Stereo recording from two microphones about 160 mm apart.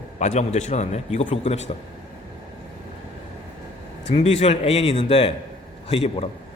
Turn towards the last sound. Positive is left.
turn(degrees=35)  # may be behind; listen again after turning